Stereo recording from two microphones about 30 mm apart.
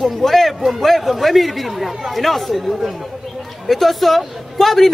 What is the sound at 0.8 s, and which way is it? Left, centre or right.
A man's voice, centre.